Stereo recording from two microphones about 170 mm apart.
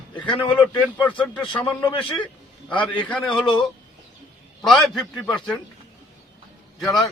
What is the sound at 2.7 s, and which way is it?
Speech, 10° left (ahead or behind).